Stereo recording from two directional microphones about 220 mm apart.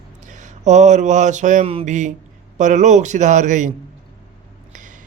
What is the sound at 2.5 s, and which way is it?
Speech, 35° right (ahead or behind).